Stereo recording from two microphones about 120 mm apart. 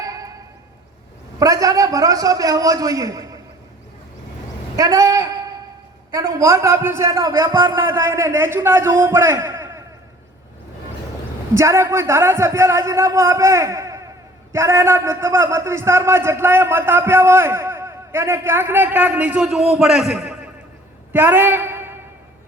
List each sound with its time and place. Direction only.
0.0 s music: 30° right (ahead or behind)
1.4 s speech: 30° right (ahead or behind)
4.8 s a sound: 30° right (ahead or behind)
6.1 s speech: 30° right (ahead or behind)
7.8 s speech: 25° right (ahead or behind)
11.5 s speech: 25° right (ahead or behind); by 20.5 s 5° right (ahead or behind)
21.1 s a sound: 15° right (ahead or behind)